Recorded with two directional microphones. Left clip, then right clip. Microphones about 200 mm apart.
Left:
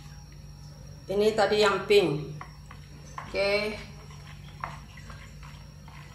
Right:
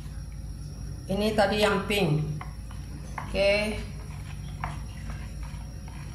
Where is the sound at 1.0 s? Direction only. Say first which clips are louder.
Left 1 dB; 30° left (ahead or behind).